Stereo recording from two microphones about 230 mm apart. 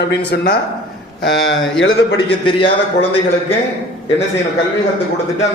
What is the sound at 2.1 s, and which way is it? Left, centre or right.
Speech, left.